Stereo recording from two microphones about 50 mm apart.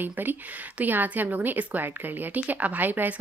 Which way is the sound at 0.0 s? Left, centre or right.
Right.